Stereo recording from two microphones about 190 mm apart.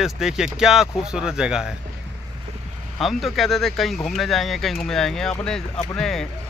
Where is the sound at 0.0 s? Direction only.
Centre (ahead or behind).